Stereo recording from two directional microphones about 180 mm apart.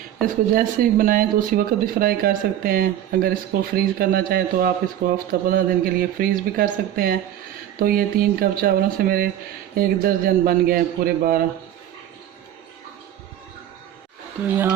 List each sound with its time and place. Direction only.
0.2 s a man's voice: 50° right (ahead or behind)